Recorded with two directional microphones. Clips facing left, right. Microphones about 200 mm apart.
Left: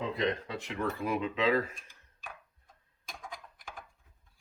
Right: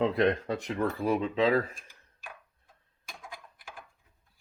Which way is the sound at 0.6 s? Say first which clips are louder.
Right 2 dB; 35° right (ahead or behind).